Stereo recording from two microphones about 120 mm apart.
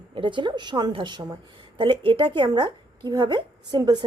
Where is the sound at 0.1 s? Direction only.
45° right (ahead or behind).